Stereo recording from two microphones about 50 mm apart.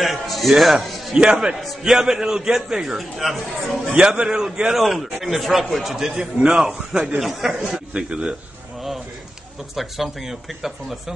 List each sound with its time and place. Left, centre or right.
0.0 s speech: centre
1.1 s a man's voice: centre
1.6 s a man's voice: centre
3.9 s a man's voice: centre
4.7 s a man's voice: centre
7.7 s a man's voice: centre
9.8 s speech: centre